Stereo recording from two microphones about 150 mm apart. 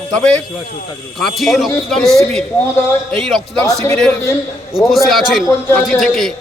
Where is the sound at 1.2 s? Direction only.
Centre (ahead or behind).